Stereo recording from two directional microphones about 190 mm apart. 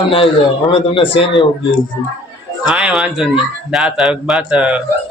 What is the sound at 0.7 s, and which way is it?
Speech, 30° left (ahead or behind).